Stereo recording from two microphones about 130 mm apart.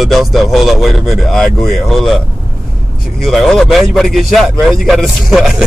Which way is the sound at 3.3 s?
Centre (ahead or behind).